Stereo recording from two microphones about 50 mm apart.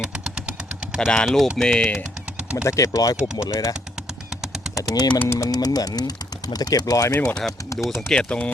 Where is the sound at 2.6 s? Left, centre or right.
Left.